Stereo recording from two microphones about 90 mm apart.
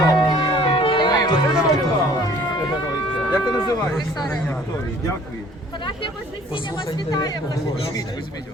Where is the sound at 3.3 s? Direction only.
45° left (ahead or behind).